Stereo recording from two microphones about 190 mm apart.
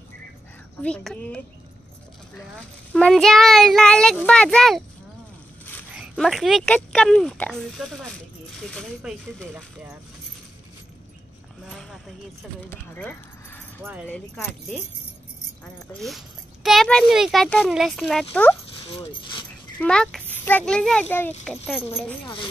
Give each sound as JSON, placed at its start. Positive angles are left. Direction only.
{"t": 0.8, "sound": "a child's voice", "side_deg": 5}
{"t": 2.9, "sound": "a child's voice", "side_deg": 5}
{"t": 5.9, "sound": "a child's voice", "side_deg": 0}
{"t": 11.6, "sound": "a sound", "side_deg": 0}
{"t": 12.6, "sound": "a child's voice", "side_deg": 10}
{"t": 16.0, "sound": "a child's voice", "side_deg": 0}
{"t": 18.9, "sound": "speech", "side_deg": 25}
{"t": 19.8, "sound": "a child's voice", "side_deg": 5}